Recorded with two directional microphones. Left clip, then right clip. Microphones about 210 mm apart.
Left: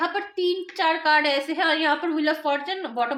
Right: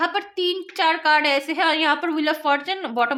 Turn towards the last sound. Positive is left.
turn(degrees=-30)  # may be behind; listen again after turning